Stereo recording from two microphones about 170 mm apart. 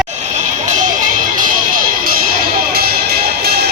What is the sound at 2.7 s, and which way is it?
Music, 65° right (ahead or behind).